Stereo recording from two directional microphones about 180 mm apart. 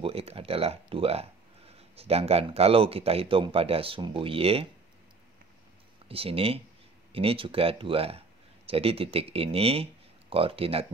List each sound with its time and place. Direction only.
0.0 s a man's voice: 35° right (ahead or behind)
6.0 s a man's voice: 30° right (ahead or behind)